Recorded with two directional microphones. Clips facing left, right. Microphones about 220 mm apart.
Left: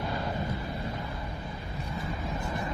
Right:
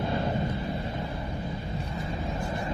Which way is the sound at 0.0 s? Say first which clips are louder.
Right 4 dB; 25° right (ahead or behind).